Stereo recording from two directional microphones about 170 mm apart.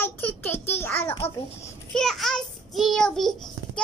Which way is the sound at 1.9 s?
Centre (ahead or behind).